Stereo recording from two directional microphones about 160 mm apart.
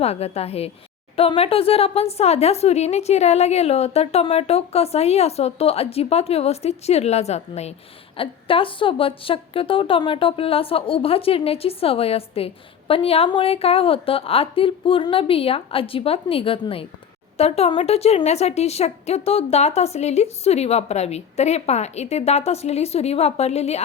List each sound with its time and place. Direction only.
0.0 s speech: 40° left (ahead or behind)